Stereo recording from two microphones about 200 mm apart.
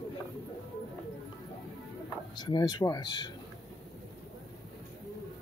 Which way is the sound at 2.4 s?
20° left (ahead or behind).